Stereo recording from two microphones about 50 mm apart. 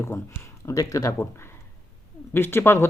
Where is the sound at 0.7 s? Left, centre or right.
Left.